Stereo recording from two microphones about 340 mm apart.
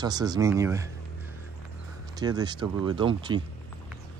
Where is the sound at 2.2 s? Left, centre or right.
Centre.